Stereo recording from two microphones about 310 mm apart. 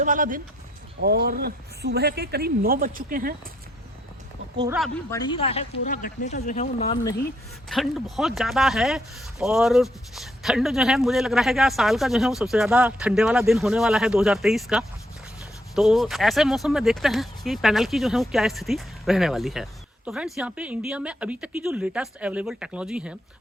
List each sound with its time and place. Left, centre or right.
0.0 s speech: right
4.6 s speech: centre
5.1 s speech: centre
7.7 s speech: centre